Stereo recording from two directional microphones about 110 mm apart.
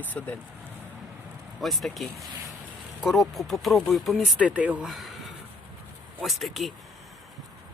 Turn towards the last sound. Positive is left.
turn(degrees=0)  # may be behind; listen again after turning